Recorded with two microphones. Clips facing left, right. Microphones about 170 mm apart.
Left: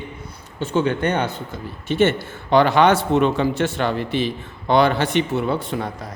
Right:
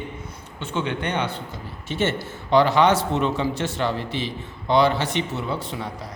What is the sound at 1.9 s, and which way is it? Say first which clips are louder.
A man's voice: left 6 dB; 60° left (ahead or behind).